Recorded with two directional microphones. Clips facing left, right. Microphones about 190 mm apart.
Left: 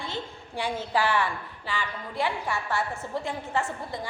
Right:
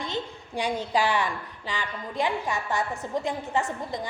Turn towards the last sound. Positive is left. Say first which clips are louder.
# right 2 dB
turn(degrees=-20)  # may be behind; listen again after turning